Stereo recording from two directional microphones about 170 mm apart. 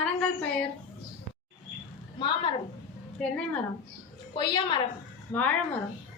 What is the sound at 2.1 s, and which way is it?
Speech, 30° left (ahead or behind).